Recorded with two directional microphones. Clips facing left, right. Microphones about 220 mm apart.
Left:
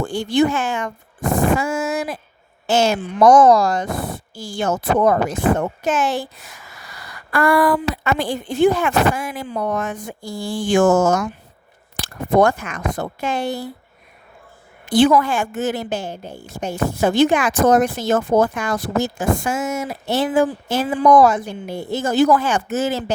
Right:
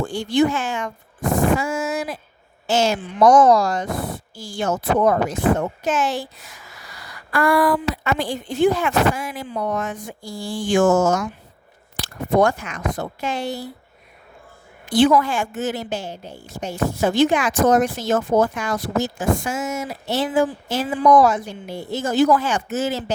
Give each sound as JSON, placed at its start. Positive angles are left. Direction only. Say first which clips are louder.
{"t": 0.1, "sound": "a woman's voice", "louder": "left 1 dB", "side_deg": 55}
{"t": 7.3, "sound": "speech", "louder": "left 2 dB", "side_deg": 55}
{"t": 14.8, "sound": "a woman's voice", "louder": "left 2 dB", "side_deg": 50}